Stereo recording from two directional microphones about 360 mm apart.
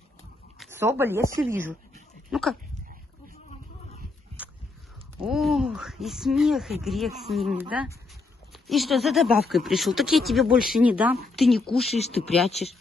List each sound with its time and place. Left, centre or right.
0.6 s speech: centre
5.2 s speech: centre
12.4 s speech: centre